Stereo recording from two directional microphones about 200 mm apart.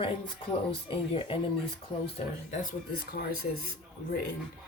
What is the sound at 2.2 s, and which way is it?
Speech, 35° left (ahead or behind).